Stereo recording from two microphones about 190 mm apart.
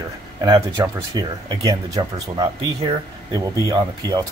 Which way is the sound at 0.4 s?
20° right (ahead or behind).